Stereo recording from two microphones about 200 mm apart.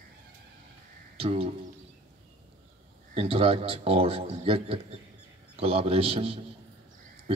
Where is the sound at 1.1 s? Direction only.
30° right (ahead or behind).